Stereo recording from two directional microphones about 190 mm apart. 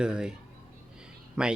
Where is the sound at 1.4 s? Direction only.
5° right (ahead or behind).